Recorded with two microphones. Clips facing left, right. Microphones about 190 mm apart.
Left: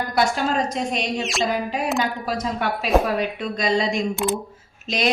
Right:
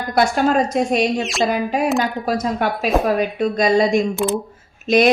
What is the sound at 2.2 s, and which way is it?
A woman's voice, 45° right (ahead or behind).